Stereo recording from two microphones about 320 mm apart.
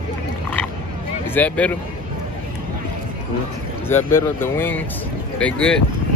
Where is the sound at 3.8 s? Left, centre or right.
Centre.